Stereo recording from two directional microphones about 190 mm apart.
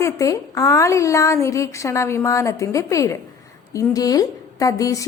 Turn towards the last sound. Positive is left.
turn(degrees=20)  # may be behind; listen again after turning